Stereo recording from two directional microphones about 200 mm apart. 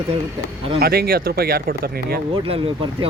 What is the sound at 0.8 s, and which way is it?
Speech, 50° right (ahead or behind).